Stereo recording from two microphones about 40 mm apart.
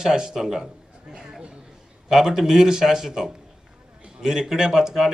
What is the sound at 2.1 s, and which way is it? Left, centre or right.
A man's voice, centre.